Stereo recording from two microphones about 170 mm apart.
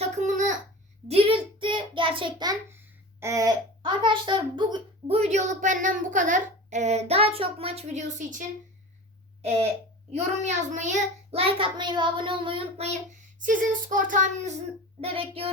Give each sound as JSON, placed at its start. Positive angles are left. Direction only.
{"t": 0.0, "sound": "babbling", "side_deg": -45}
{"t": 1.0, "sound": "a sound", "side_deg": -35}
{"t": 9.4, "sound": "a sound", "side_deg": -35}
{"t": 10.1, "sound": "child singing", "side_deg": -40}
{"t": 13.4, "sound": "child singing", "side_deg": -50}
{"t": 15.0, "sound": "child singing", "side_deg": -35}